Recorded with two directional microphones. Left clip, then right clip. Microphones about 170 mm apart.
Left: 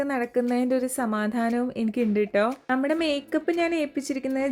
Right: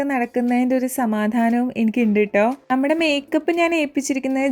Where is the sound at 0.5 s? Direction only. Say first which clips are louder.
Right 5 dB; 10° right (ahead or behind).